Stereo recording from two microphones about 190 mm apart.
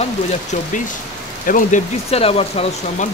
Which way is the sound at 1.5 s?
45° left (ahead or behind).